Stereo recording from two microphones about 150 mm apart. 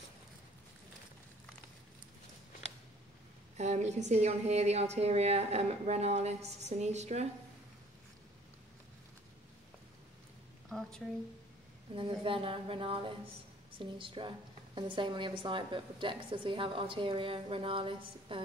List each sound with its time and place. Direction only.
3.5 s a woman's voice: 50° right (ahead or behind)
10.7 s a sound: 5° left (ahead or behind)
11.9 s a woman's voice: 35° right (ahead or behind)